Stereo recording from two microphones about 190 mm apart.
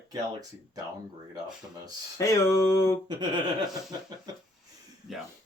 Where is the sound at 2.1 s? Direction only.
15° left (ahead or behind).